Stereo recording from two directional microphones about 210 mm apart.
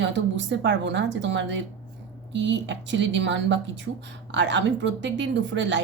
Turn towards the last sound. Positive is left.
turn(degrees=-60)  # may be behind; listen again after turning